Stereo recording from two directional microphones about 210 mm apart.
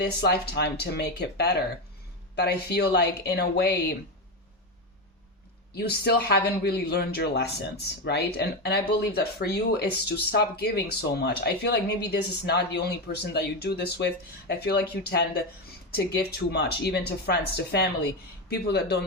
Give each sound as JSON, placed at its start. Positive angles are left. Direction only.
{"t": 0.0, "sound": "speech", "side_deg": 50}
{"t": 5.7, "sound": "speech", "side_deg": 50}